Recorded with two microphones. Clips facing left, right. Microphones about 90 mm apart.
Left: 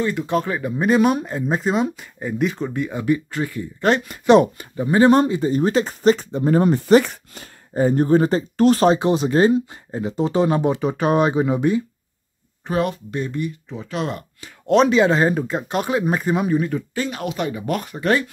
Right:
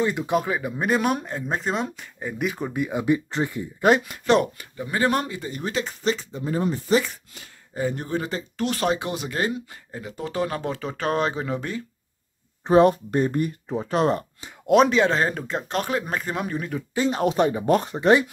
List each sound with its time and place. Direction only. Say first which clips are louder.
0.0 s speech: left 2 dB; 15° right (ahead or behind)
3.8 s speech: even; 5° right (ahead or behind)
4.3 s speech: left 7 dB; 25° left (ahead or behind); by 7.2 s 60° left (ahead or behind)
7.3 s speech: left 9 dB; 40° left (ahead or behind); by 11.8 s 15° left (ahead or behind)
12.6 s speech: right 6 dB; 30° right (ahead or behind)
14.7 s speech: left 2 dB; centre (ahead or behind)
17.1 s speech: right 4 dB; 35° right (ahead or behind)